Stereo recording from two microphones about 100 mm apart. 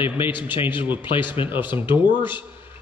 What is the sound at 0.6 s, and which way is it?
Speech, 55° left (ahead or behind).